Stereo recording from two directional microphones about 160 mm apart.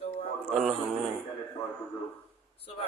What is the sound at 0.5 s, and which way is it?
Speech, centre (ahead or behind).